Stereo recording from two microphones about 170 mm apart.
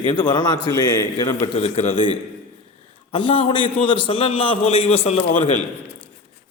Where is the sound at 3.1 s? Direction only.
30° left (ahead or behind).